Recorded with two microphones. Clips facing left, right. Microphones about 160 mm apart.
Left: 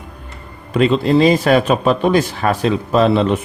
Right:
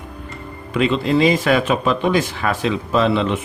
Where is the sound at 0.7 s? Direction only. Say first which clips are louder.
Left 4 dB; 40° left (ahead or behind).